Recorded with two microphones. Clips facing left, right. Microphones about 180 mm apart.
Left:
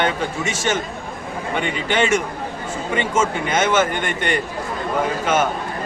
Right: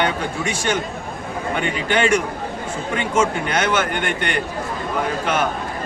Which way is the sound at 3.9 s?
60° right (ahead or behind).